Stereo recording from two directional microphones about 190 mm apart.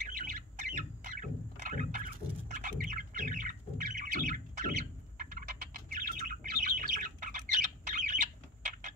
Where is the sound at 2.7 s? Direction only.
50° right (ahead or behind).